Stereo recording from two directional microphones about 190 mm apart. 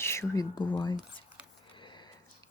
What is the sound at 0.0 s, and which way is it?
Speech, 15° left (ahead or behind).